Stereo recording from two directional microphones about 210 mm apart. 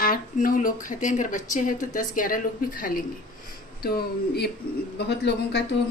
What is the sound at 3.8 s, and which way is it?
A woman's voice, 50° left (ahead or behind).